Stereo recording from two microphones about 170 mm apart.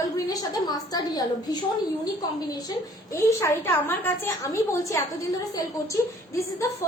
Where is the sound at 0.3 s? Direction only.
20° left (ahead or behind).